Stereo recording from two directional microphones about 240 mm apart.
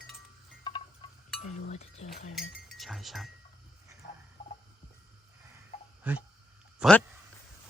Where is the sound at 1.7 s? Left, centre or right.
Left.